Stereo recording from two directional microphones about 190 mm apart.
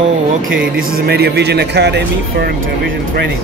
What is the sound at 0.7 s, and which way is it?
Speech, 55° right (ahead or behind).